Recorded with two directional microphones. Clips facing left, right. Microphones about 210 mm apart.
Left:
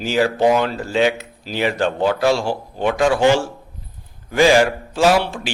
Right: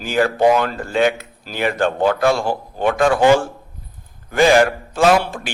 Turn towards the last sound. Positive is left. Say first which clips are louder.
# right 1 dB
turn(degrees=-55)  # may be behind; listen again after turning